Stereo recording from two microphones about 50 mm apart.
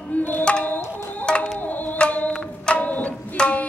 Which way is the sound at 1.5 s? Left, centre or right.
Left.